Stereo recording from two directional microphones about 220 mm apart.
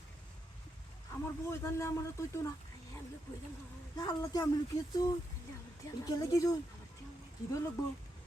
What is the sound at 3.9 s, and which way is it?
Speech, 15° left (ahead or behind).